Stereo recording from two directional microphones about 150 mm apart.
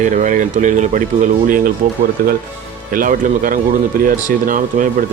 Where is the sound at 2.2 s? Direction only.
80° right.